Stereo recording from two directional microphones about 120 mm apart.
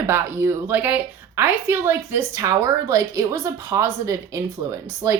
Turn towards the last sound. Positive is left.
turn(degrees=-25)  # may be behind; listen again after turning